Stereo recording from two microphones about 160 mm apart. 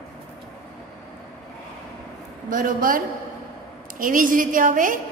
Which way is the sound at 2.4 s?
60° right (ahead or behind).